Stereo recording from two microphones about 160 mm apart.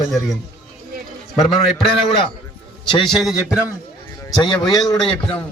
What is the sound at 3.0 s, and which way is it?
Speech, centre (ahead or behind).